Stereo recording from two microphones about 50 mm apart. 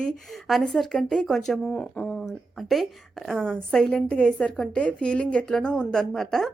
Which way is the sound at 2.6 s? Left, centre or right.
Centre.